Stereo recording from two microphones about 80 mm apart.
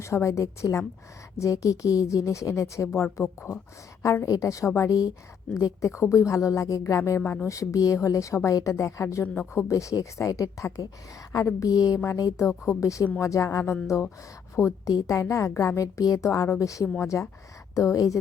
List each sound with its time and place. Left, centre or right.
0.0 s a woman's voice: left